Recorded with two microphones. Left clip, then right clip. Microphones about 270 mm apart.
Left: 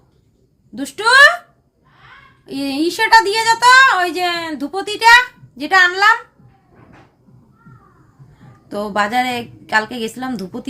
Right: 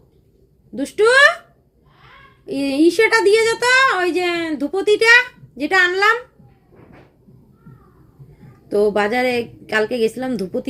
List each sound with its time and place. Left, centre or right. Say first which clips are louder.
0.8 s a woman's voice: left 3 dB; centre
2.5 s a woman's voice: right 4 dB; centre
8.7 s a woman's voice: right 1 dB; centre